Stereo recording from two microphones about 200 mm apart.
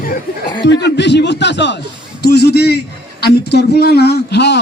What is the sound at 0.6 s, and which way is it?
A man's voice, 60° left (ahead or behind).